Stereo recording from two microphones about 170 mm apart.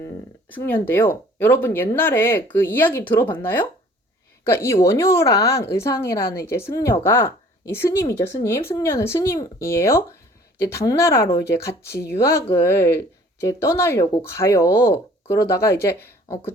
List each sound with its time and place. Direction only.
0.0 s speech: 10° left (ahead or behind)